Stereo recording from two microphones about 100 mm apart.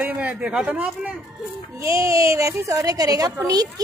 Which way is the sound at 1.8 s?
30° right (ahead or behind).